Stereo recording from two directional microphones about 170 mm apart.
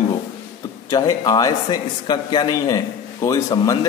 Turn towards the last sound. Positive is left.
turn(degrees=20)  # may be behind; listen again after turning